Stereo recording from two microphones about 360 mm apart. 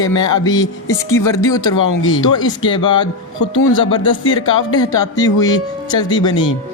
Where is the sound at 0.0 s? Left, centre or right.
Centre.